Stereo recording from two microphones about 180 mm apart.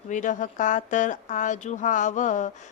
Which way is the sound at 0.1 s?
45° left (ahead or behind).